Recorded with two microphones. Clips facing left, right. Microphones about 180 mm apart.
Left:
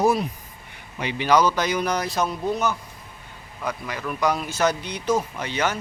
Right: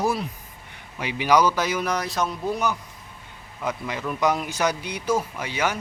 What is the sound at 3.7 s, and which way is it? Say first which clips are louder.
Speech: right 1 dB; 20° right (ahead or behind).